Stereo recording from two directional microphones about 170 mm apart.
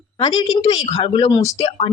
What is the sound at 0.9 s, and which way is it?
Speech, 40° left (ahead or behind).